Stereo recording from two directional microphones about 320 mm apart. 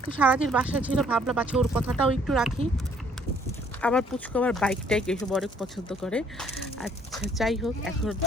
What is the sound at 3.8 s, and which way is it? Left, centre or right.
Speech, centre.